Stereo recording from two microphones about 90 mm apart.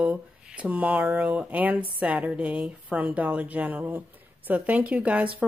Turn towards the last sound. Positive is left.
turn(degrees=-15)  # may be behind; listen again after turning